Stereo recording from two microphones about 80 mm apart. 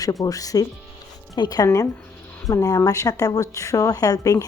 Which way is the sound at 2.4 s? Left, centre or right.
Left.